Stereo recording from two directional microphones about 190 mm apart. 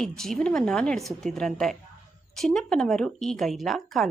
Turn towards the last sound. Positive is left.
turn(degrees=0)  # may be behind; listen again after turning